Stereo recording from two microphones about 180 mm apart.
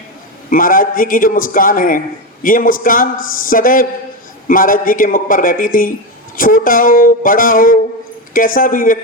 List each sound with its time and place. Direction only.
0.5 s a man's voice: 50° left (ahead or behind)